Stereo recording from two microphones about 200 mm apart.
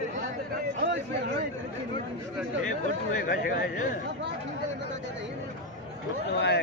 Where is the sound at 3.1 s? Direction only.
40° left (ahead or behind).